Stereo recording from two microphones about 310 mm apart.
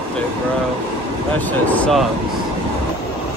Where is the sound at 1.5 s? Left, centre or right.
Centre.